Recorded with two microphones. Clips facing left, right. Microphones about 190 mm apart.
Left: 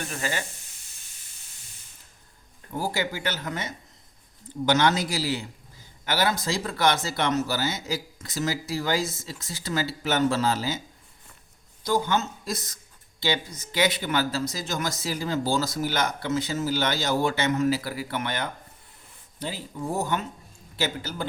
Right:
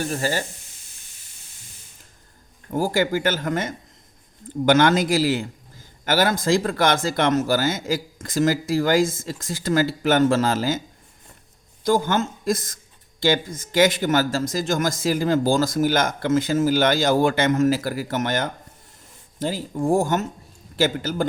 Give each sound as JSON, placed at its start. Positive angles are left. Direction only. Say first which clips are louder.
{"t": 0.0, "sound": "speech", "louder": "right 7 dB", "side_deg": -35}
{"t": 2.6, "sound": "a man's voice", "louder": "right 7 dB", "side_deg": -45}
{"t": 11.9, "sound": "a man's voice", "louder": "right 4 dB", "side_deg": -50}